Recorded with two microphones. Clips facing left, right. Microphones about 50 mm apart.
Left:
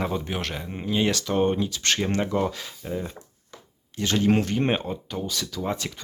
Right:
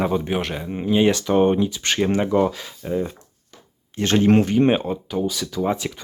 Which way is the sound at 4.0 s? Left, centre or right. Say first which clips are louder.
Right 4 dB; right.